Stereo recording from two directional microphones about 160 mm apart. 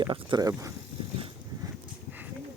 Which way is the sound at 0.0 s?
30° right (ahead or behind).